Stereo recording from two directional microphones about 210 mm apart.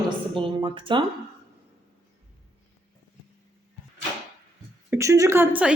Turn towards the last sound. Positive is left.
turn(degrees=-10)  # may be behind; listen again after turning